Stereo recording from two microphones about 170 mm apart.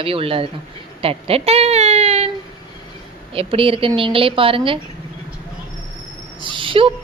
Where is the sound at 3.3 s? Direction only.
35° right (ahead or behind).